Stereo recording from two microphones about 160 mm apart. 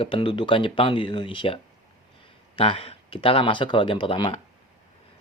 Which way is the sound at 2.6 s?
35° left (ahead or behind).